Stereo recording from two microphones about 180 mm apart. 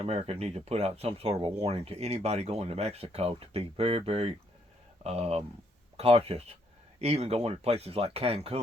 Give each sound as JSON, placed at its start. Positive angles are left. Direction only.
{"t": 0.0, "sound": "speech", "side_deg": -35}